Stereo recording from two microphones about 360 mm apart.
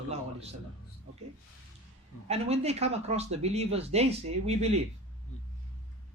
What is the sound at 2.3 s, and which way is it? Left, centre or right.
A man's voice, centre.